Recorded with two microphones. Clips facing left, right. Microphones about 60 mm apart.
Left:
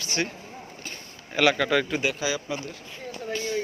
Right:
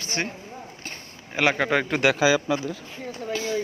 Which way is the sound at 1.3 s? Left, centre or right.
Right.